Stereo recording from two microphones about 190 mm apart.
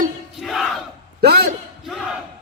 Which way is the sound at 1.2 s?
60° right (ahead or behind).